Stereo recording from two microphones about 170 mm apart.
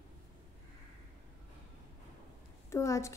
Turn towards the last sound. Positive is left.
turn(degrees=15)  # may be behind; listen again after turning